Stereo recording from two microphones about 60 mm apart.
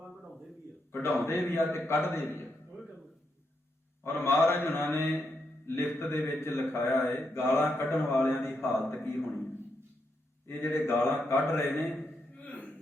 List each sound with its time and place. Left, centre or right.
0.9 s a man's voice: left
4.0 s a man's voice: left
10.5 s a man's voice: left
12.4 s a sound: left